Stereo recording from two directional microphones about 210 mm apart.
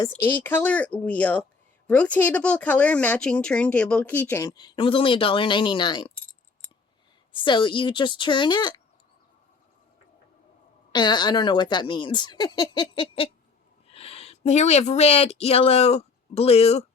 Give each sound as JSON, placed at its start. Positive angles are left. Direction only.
{"t": 0.1, "sound": "speech", "side_deg": 10}
{"t": 7.4, "sound": "speech", "side_deg": 25}
{"t": 10.9, "sound": "speech", "side_deg": 20}